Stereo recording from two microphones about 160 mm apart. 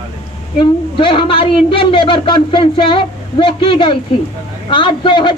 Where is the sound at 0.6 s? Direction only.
30° left (ahead or behind).